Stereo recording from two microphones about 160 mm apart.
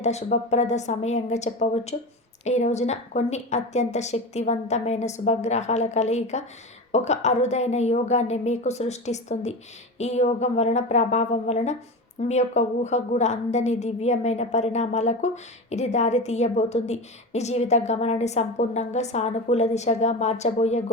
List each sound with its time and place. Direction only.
0.0 s a woman's voice: 45° left (ahead or behind)